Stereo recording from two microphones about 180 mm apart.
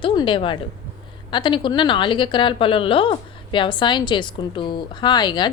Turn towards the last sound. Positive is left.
turn(degrees=25)  # may be behind; listen again after turning